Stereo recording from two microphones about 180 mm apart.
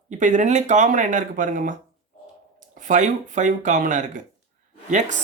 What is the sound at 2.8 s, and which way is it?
Speech, 45° right (ahead or behind).